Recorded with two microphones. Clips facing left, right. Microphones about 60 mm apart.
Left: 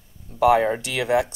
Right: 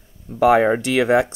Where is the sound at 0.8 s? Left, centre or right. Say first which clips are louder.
Right 5 dB; right.